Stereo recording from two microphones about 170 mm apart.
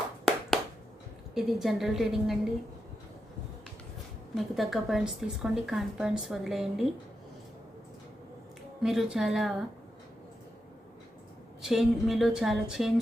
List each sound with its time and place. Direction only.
0.3 s a sound: centre (ahead or behind)
1.3 s speech: centre (ahead or behind)
4.4 s speech: centre (ahead or behind)
8.8 s speech: centre (ahead or behind)
11.6 s speech: centre (ahead or behind)